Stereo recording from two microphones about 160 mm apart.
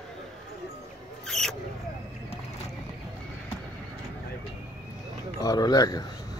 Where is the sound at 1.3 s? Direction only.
Centre (ahead or behind).